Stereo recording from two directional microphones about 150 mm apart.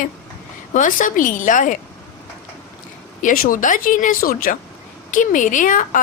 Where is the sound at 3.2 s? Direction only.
65° left (ahead or behind).